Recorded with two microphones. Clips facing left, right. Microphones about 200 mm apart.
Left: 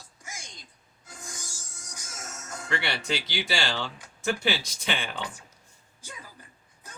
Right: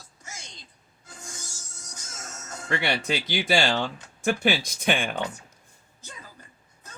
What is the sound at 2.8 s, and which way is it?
Speech, 50° right (ahead or behind).